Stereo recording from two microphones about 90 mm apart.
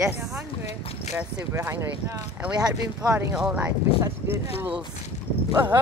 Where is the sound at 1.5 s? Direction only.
30° right (ahead or behind).